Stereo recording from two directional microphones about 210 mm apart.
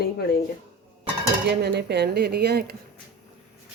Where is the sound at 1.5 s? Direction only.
55° right (ahead or behind).